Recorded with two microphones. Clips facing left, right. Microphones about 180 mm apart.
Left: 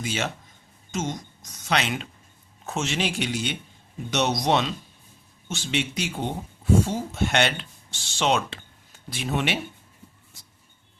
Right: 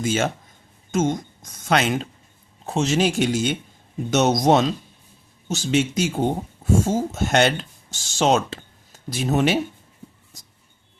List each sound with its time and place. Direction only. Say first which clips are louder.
0.0 s speech: right 7 dB; 45° right (ahead or behind)